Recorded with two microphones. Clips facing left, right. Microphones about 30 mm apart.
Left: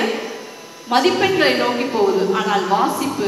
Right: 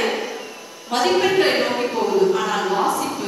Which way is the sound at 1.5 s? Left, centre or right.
Centre.